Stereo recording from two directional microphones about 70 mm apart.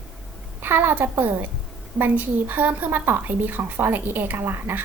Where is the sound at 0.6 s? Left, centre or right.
Right.